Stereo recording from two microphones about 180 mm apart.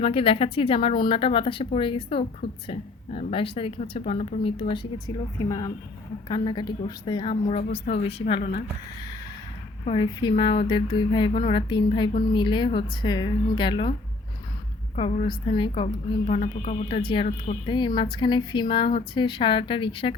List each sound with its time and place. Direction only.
0.0 s speech: 30° left (ahead or behind)
9.8 s speech: 30° left (ahead or behind)
14.9 s speech: 35° left (ahead or behind)
17.0 s speech: 30° left (ahead or behind)
17.2 s speech: 40° left (ahead or behind)
17.7 s speech: 25° left (ahead or behind)